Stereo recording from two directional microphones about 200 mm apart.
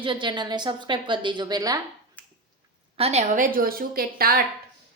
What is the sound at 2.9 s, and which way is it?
A woman's voice, 30° right (ahead or behind).